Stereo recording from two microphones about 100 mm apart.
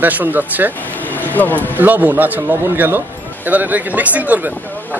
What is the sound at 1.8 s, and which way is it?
Speech, 20° right (ahead or behind).